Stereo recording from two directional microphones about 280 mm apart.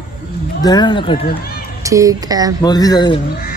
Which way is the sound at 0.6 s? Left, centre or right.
Centre.